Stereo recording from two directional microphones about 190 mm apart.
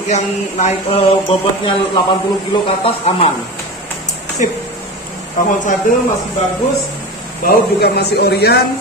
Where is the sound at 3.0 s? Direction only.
35° left (ahead or behind).